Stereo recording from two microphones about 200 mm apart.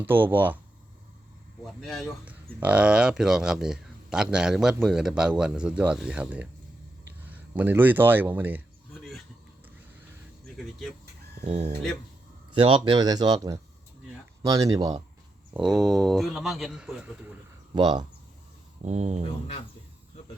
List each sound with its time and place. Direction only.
0.0 s speech: 10° right (ahead or behind)
1.6 s speech: centre (ahead or behind)
8.9 s a sound: centre (ahead or behind)
10.4 s speech: centre (ahead or behind)
11.4 s speech: 30° right (ahead or behind)
15.5 s speech: centre (ahead or behind)
17.7 s speech: 20° right (ahead or behind)
18.9 s speech: 35° right (ahead or behind)